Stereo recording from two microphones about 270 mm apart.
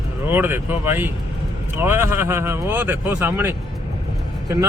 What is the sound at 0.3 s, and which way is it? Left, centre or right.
Speech, centre.